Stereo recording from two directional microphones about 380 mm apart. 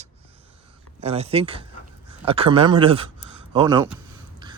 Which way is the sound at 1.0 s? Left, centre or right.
Centre.